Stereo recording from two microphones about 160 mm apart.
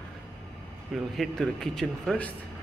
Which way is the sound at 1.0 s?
Centre (ahead or behind).